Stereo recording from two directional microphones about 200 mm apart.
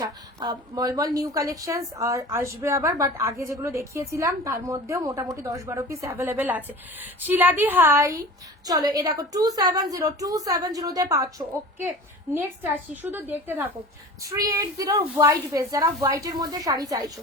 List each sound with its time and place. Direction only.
0.0 s a woman's voice: 20° right (ahead or behind)